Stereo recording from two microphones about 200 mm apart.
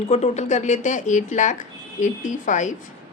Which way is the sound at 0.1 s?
35° left (ahead or behind).